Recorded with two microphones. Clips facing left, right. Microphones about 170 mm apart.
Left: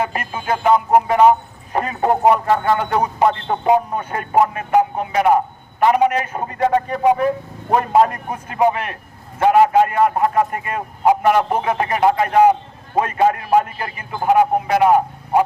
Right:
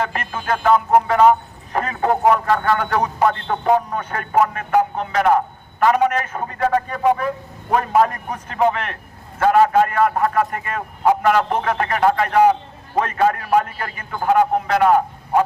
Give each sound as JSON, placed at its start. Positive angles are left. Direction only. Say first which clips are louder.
{"t": 0.0, "sound": "a man's voice", "louder": "left 1 dB", "side_deg": 10}
{"t": 8.3, "sound": "a man's voice", "louder": "left 1 dB", "side_deg": 10}